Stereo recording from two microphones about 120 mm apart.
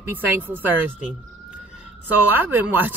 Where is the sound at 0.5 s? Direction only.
15° right (ahead or behind).